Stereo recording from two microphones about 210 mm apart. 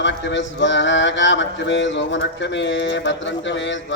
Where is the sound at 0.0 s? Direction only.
60° left (ahead or behind).